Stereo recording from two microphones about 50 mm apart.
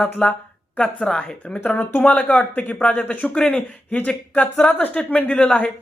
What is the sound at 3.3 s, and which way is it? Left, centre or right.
A man's voice, centre.